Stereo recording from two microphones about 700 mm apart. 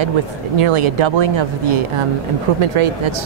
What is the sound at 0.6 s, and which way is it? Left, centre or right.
Speech, right.